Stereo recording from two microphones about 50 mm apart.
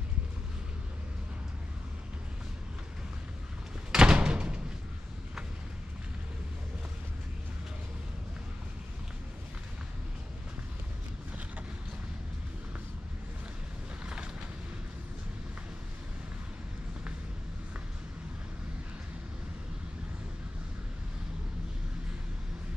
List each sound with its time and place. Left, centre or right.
3.9 s door: centre
14.0 s vehicle: centre